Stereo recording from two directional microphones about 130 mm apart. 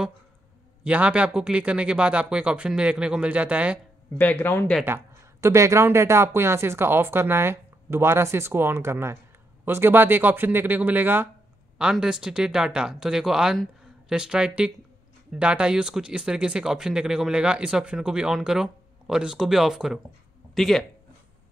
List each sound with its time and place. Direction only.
0.8 s speech: 10° right (ahead or behind)
4.2 s speech: 15° left (ahead or behind)
4.8 s speech: 20° right (ahead or behind); by 20.8 s centre (ahead or behind)